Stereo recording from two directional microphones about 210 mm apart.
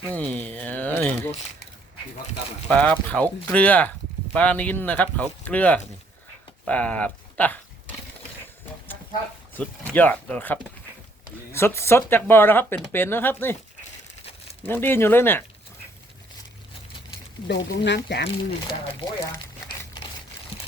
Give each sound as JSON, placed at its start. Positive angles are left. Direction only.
{"t": 0.0, "sound": "a sound", "side_deg": 5}
{"t": 2.6, "sound": "speech", "side_deg": 5}
{"t": 9.6, "sound": "speech", "side_deg": 10}
{"t": 14.6, "sound": "speech", "side_deg": 10}
{"t": 17.5, "sound": "speech", "side_deg": 55}
{"t": 18.9, "sound": "speech", "side_deg": 25}